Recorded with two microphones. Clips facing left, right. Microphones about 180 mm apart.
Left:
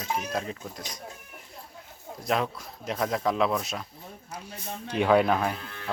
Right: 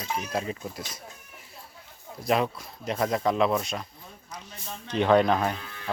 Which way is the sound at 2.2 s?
Centre (ahead or behind).